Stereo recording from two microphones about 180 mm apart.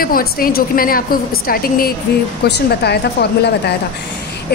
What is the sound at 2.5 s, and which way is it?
A woman's voice, 70° left (ahead or behind).